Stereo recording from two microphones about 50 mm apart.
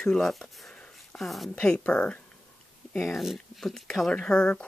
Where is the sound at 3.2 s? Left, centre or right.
Centre.